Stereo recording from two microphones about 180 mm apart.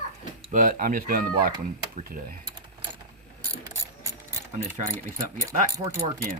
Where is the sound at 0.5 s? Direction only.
50° right (ahead or behind).